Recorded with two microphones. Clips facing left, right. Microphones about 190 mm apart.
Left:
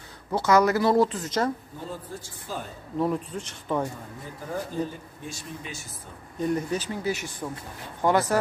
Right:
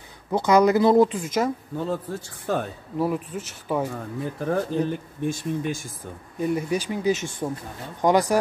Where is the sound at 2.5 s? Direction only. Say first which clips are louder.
Right 10 dB; 65° right (ahead or behind).